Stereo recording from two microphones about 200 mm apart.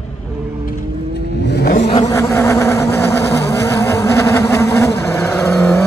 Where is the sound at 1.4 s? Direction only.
55° left (ahead or behind).